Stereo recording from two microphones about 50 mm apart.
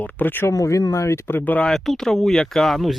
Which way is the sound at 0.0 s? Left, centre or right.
Left.